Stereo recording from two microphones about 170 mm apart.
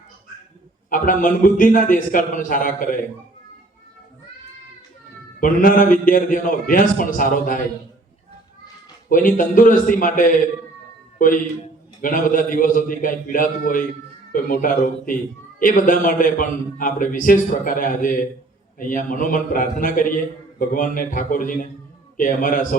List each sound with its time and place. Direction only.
0.9 s a man's voice: 50° left (ahead or behind)
5.4 s a man's voice: 55° left (ahead or behind)
9.0 s a man's voice: 50° left (ahead or behind)